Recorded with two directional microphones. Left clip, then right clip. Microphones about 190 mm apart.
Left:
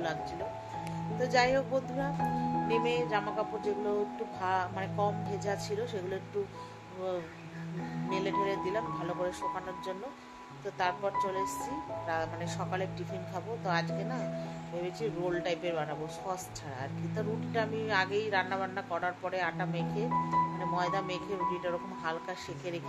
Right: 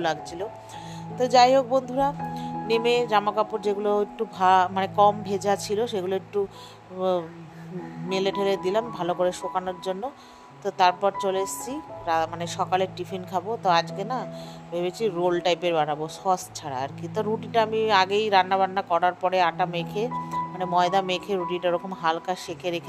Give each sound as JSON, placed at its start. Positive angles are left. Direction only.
{"t": 1.1, "sound": "speech", "side_deg": -45}
{"t": 2.1, "sound": "music", "side_deg": 0}
{"t": 2.7, "sound": "speech", "side_deg": -50}
{"t": 8.1, "sound": "speech", "side_deg": -45}